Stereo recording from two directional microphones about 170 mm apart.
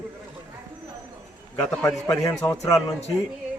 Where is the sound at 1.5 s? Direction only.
15° left (ahead or behind).